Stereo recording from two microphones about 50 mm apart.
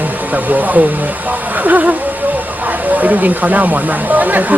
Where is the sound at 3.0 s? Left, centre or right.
Right.